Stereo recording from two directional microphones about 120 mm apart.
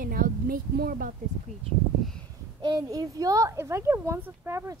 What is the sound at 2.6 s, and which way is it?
A child's voice, 35° right (ahead or behind).